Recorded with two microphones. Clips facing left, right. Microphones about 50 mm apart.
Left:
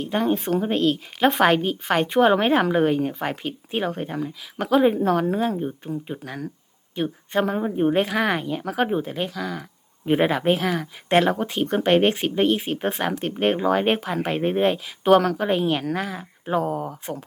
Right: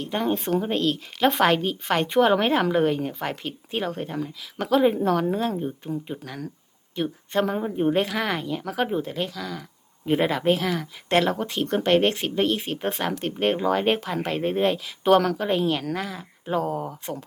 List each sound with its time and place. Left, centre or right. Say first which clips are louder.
0.0 s speech: left 3 dB; centre